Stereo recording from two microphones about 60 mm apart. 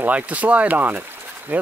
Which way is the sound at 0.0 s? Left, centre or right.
Right.